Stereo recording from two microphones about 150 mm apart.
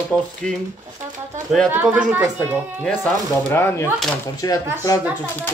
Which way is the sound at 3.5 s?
15° left (ahead or behind).